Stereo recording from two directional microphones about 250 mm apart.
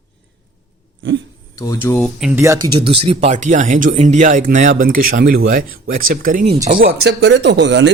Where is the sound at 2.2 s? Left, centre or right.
Centre; by 7.9 s right.